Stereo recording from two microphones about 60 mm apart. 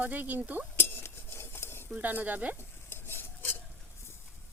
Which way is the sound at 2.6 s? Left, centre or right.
Left.